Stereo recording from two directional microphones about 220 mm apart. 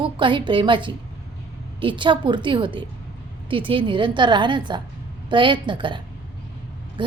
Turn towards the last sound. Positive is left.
turn(degrees=-20)  # may be behind; listen again after turning